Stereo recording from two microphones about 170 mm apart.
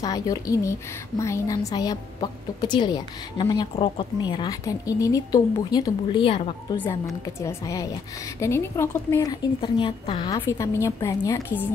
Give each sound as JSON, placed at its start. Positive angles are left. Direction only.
{"t": 0.0, "sound": "a woman's voice", "side_deg": 20}
{"t": 6.8, "sound": "a woman's voice", "side_deg": 15}
{"t": 10.4, "sound": "a woman's voice", "side_deg": 15}